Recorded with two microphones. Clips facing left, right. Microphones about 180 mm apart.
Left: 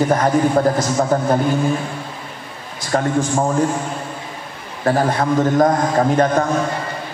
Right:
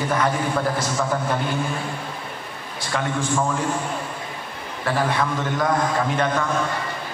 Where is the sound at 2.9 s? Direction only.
40° left (ahead or behind).